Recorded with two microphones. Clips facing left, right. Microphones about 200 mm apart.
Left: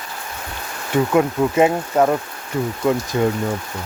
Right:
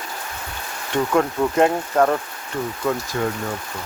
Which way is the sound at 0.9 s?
5° left (ahead or behind).